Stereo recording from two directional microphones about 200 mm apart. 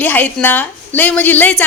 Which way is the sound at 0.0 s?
10° left (ahead or behind).